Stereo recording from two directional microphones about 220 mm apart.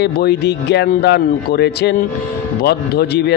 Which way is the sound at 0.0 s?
50° left (ahead or behind).